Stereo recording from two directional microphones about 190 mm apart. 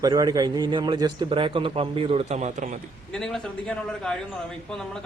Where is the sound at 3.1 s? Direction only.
5° left (ahead or behind).